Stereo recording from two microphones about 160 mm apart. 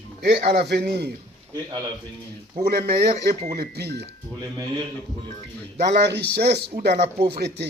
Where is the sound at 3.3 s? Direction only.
40° right (ahead or behind).